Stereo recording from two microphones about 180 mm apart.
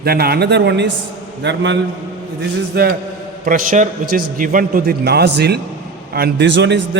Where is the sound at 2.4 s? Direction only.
60° right (ahead or behind).